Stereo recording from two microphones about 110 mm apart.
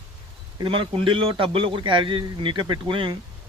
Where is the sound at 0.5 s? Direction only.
50° right (ahead or behind).